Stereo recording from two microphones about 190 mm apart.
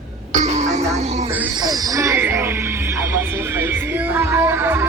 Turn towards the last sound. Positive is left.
turn(degrees=-15)  # may be behind; listen again after turning